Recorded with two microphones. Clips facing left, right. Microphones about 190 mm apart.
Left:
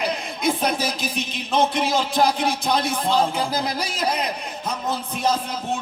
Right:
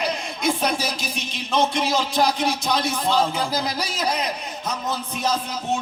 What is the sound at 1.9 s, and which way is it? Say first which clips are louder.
Music: left 1 dB; 55° left (ahead or behind).